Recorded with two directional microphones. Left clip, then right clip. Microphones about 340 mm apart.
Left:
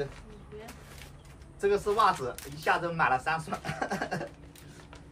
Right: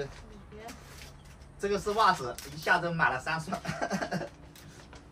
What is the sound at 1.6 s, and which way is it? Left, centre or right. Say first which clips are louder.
Speech: left 2 dB; centre.